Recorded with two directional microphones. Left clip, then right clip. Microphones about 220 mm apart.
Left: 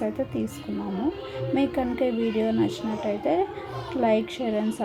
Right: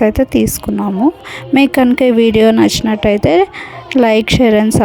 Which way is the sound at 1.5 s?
50° right (ahead or behind).